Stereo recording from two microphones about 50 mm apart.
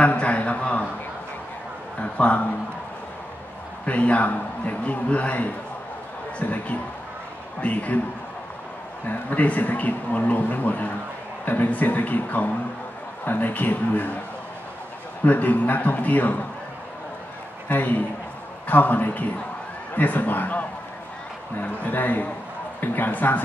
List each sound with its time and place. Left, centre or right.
0.0 s a sound: left
2.0 s a man's voice: left
3.8 s a man's voice: left
7.6 s a man's voice: left
9.0 s a man's voice: left
15.2 s a man's voice: left
17.6 s a man's voice: left